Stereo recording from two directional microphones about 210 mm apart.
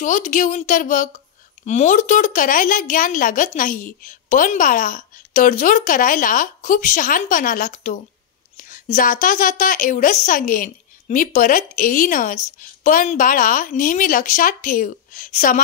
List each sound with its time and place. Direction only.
0.0 s a woman's voice: 35° left (ahead or behind)